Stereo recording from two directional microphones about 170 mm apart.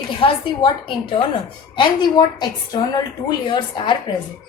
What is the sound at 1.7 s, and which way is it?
A woman's voice, 25° left (ahead or behind).